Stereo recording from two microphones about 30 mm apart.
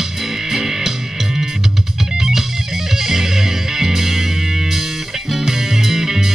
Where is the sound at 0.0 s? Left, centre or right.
Centre.